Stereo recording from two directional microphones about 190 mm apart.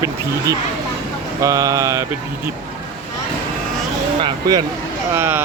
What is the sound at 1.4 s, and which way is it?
Speech, 20° right (ahead or behind).